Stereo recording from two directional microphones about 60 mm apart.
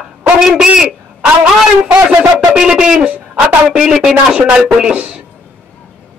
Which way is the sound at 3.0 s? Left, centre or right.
Right.